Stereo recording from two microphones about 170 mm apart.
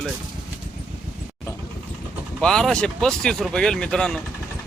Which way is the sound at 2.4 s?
5° left (ahead or behind).